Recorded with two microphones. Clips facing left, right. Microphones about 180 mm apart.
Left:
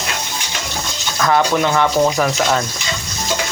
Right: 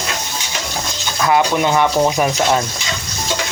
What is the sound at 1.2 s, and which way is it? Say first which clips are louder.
Speech: even; 15° right (ahead or behind).